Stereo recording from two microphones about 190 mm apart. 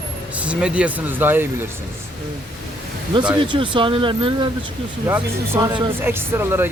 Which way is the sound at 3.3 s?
25° right (ahead or behind).